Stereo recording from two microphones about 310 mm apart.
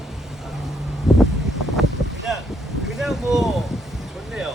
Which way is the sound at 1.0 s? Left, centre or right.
Centre.